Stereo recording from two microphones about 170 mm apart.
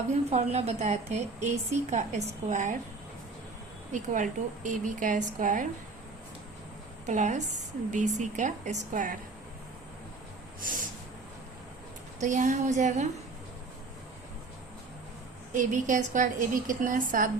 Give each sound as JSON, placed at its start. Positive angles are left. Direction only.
{"t": 0.1, "sound": "a woman's voice", "side_deg": -40}
{"t": 3.9, "sound": "a woman's voice", "side_deg": -50}
{"t": 7.0, "sound": "a woman's voice", "side_deg": -45}
{"t": 12.2, "sound": "a woman's voice", "side_deg": -45}
{"t": 15.5, "sound": "a woman's voice", "side_deg": -50}